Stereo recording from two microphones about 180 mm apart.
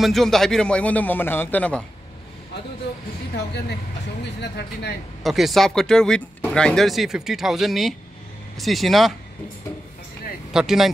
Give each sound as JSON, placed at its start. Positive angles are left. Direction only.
{"t": 0.0, "sound": "speech", "side_deg": 0}
{"t": 3.3, "sound": "speech", "side_deg": 65}
{"t": 5.2, "sound": "speech", "side_deg": 0}
{"t": 10.5, "sound": "speech", "side_deg": -5}